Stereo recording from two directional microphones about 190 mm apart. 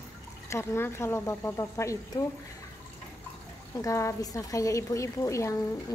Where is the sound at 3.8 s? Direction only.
15° left (ahead or behind).